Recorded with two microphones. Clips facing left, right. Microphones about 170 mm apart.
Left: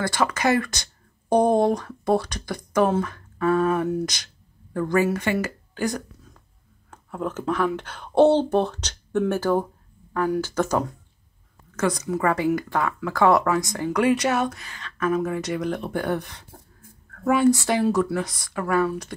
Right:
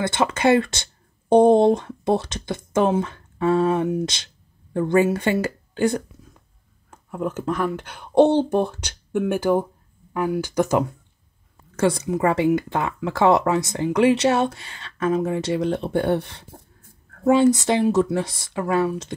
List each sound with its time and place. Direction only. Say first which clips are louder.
0.0 s speech: right 3 dB; 25° right (ahead or behind)
6.9 s a sound: right 2 dB; 10° right (ahead or behind)
7.5 s speech: left 1 dB; 10° right (ahead or behind)
11.7 s speech: right 3 dB; 30° right (ahead or behind)